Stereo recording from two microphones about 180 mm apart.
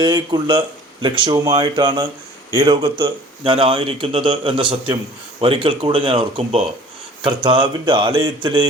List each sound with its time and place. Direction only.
0.0 s a man's voice: 25° right (ahead or behind)